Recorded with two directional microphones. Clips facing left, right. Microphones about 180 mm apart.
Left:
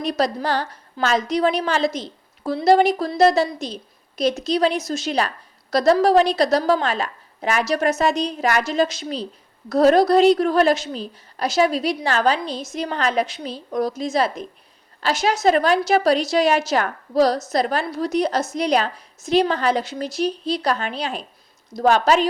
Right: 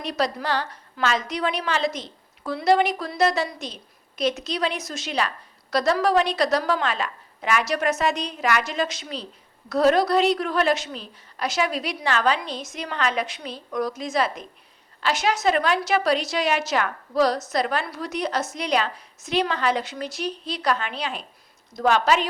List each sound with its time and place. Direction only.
0.0 s a woman's voice: 40° left (ahead or behind)